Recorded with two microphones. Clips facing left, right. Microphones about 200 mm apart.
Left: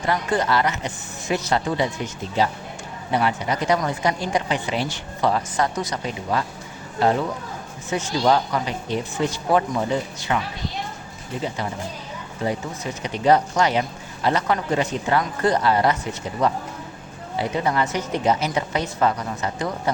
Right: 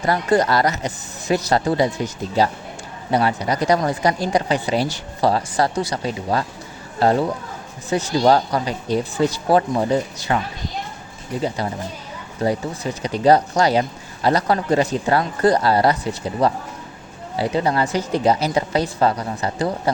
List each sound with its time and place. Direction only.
0.0 s a woman's voice: 40° right (ahead or behind)
7.9 s a woman's voice: 35° right (ahead or behind)
11.4 s a woman's voice: 35° right (ahead or behind)